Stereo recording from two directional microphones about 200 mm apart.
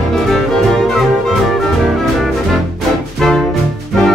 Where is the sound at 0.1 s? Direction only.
Centre (ahead or behind).